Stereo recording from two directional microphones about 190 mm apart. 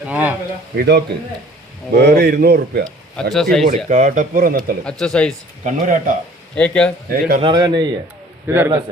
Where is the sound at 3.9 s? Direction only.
40° right (ahead or behind).